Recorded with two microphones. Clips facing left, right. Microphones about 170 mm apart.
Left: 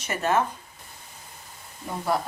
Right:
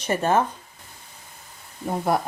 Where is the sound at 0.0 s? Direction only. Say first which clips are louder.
Right 3 dB; 30° right (ahead or behind).